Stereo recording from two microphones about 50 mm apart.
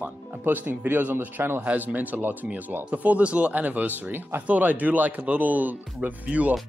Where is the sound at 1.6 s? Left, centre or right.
Right.